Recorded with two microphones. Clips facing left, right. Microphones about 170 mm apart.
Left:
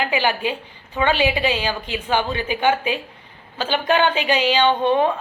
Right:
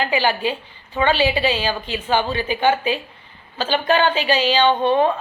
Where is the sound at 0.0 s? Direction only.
15° left (ahead or behind).